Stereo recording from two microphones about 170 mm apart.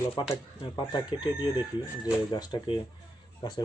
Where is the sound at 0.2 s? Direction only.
25° left (ahead or behind).